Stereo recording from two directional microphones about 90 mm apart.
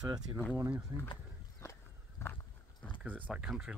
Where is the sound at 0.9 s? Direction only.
45° right (ahead or behind).